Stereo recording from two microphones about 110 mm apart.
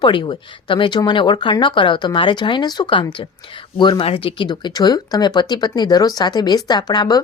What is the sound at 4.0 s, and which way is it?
Speech, 55° left (ahead or behind).